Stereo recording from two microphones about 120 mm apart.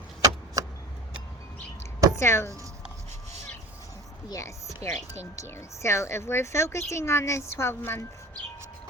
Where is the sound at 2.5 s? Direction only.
25° right (ahead or behind).